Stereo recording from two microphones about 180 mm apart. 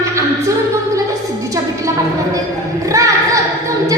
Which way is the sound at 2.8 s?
20° right (ahead or behind).